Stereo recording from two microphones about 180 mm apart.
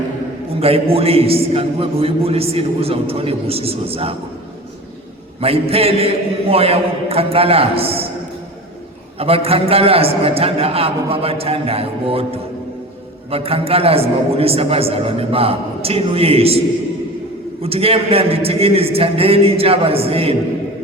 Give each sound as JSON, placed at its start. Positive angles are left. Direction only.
{"t": 0.6, "sound": "a man's voice", "side_deg": -35}
{"t": 5.4, "sound": "a man's voice", "side_deg": -35}
{"t": 9.1, "sound": "a man's voice", "side_deg": -35}
{"t": 17.6, "sound": "a man's voice", "side_deg": -35}